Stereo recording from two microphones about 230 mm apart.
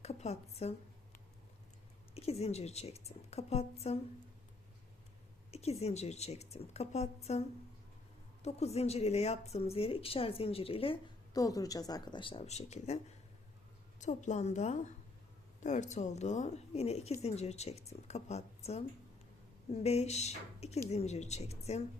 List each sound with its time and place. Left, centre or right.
0.0 s a woman's voice: left
2.1 s speech: left
5.5 s speech: left
14.0 s a woman's voice: left